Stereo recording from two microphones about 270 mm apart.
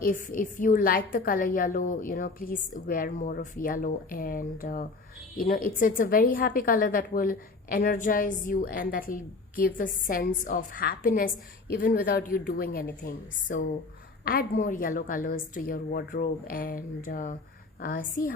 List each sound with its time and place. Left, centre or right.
0.0 s a woman's voice: left